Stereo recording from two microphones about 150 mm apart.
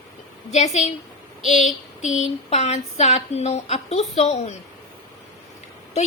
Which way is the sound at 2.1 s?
45° left (ahead or behind).